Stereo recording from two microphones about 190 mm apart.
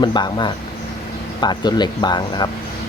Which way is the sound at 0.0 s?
25° left (ahead or behind).